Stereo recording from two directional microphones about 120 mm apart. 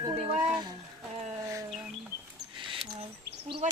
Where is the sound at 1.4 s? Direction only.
25° right (ahead or behind).